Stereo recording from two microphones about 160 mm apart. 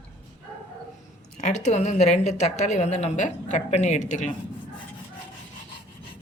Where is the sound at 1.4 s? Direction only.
50° left (ahead or behind).